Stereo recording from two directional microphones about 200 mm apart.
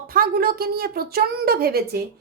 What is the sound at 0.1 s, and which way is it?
A woman's voice, 50° right (ahead or behind).